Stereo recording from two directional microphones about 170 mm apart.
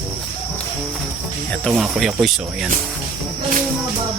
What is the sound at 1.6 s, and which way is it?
Speech, centre (ahead or behind).